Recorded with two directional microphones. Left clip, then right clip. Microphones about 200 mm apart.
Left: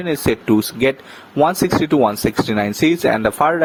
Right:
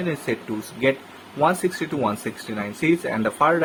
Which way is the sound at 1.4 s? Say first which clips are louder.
Left 6 dB; 45° left (ahead or behind).